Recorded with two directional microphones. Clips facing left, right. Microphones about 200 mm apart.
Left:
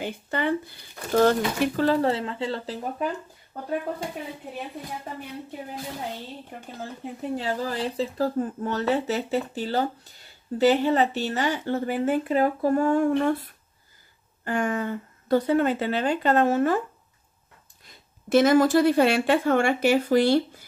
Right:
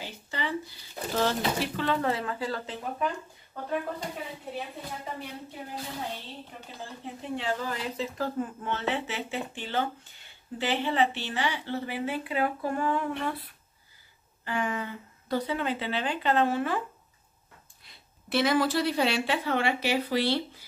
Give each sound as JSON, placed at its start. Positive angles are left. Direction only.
{"t": 0.0, "sound": "speech", "side_deg": 55}
{"t": 6.8, "sound": "a woman's voice", "side_deg": 40}
{"t": 17.8, "sound": "a woman's voice", "side_deg": 45}